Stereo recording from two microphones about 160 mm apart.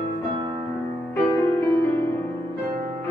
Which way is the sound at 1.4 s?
15° left (ahead or behind).